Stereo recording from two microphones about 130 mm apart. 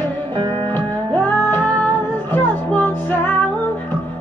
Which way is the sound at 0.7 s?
15° left (ahead or behind).